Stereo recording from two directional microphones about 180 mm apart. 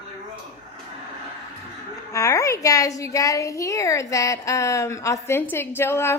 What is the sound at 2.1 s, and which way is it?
A woman's voice, 15° left (ahead or behind).